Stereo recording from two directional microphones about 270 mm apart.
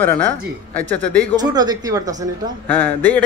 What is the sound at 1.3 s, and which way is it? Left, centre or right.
Speech, centre.